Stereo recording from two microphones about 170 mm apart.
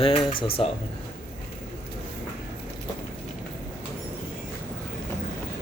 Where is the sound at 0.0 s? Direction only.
30° left (ahead or behind).